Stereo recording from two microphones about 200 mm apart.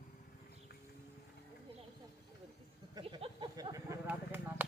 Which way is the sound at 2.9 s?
25° right (ahead or behind).